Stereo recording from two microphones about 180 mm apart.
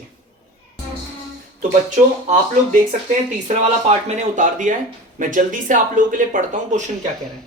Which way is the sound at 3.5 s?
40° right (ahead or behind).